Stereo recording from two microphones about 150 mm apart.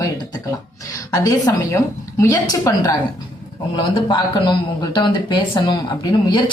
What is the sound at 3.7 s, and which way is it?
Speech, 30° left (ahead or behind).